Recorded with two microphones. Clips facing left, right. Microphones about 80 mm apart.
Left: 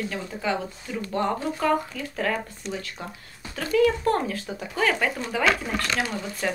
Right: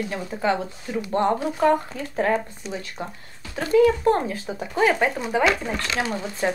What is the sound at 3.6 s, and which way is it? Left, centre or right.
Speech, right.